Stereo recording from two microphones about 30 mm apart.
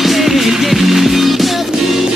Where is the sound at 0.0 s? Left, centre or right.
Centre.